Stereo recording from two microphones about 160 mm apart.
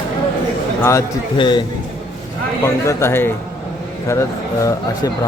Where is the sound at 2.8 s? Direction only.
15° left (ahead or behind).